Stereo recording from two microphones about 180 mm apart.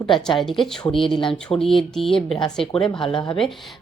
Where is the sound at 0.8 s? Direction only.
30° left (ahead or behind).